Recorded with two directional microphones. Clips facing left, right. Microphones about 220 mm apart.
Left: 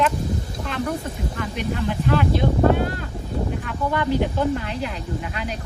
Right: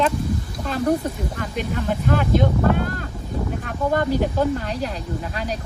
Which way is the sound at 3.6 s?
40° right (ahead or behind).